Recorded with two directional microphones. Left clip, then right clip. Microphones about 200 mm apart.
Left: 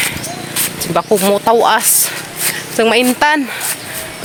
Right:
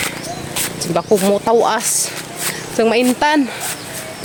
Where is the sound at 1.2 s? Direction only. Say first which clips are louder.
Left 5 dB; centre (ahead or behind).